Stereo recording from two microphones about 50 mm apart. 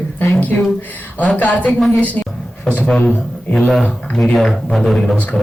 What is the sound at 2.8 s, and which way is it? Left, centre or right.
A man's voice, centre.